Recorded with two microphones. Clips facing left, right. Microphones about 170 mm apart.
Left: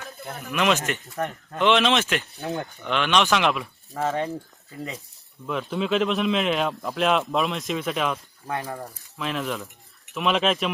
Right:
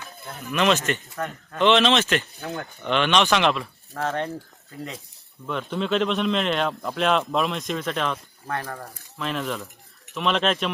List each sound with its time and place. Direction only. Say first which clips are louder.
0.5 s speech: right 2 dB; 10° left (ahead or behind)
8.4 s speech: left 1 dB; 15° left (ahead or behind)
9.1 s speech: even; centre (ahead or behind)